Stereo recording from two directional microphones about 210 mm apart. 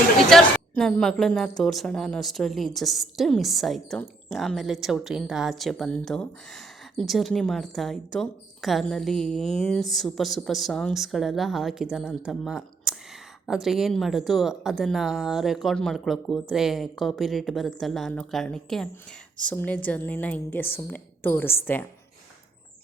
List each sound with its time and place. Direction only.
0.3 s a woman's voice: centre (ahead or behind)